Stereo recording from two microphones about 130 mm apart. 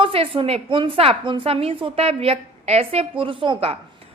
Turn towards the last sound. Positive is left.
turn(degrees=-45)  # may be behind; listen again after turning